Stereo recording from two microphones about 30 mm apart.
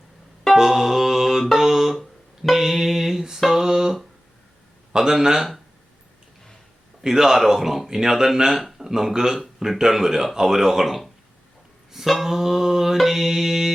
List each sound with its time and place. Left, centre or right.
0.5 s music: centre
3.5 s a sound: right
4.9 s speech: centre
7.0 s speech: centre
8.8 s a sound: centre
9.3 s speech: centre
12.2 s speech: centre